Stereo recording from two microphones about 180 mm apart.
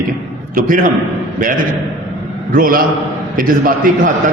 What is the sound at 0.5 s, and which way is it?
Speech, 50° right (ahead or behind).